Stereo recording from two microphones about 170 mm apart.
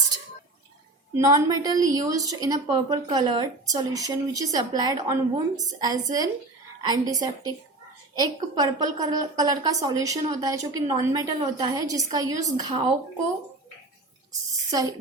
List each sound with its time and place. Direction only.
1.1 s a woman's voice: 20° right (ahead or behind)
14.7 s a woman's voice: 20° right (ahead or behind)